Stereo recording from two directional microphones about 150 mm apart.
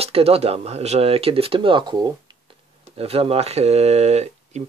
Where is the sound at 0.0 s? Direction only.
40° right (ahead or behind).